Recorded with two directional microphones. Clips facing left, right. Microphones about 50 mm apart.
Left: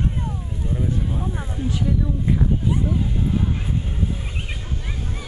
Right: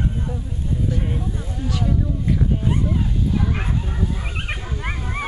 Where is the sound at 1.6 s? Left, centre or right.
Left.